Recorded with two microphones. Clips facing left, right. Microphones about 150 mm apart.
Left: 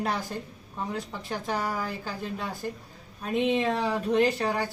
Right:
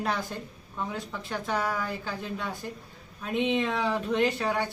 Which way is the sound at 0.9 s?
35° left (ahead or behind).